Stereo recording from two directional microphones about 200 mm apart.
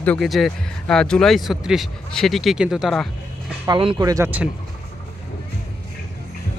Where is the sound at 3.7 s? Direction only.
20° right (ahead or behind).